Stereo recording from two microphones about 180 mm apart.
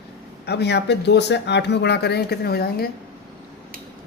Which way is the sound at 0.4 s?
70° left (ahead or behind).